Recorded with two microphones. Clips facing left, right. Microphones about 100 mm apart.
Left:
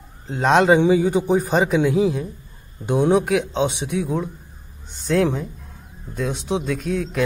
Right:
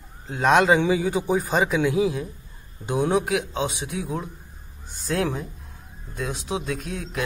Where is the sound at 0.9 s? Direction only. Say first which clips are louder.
Left 5 dB; 50° left (ahead or behind).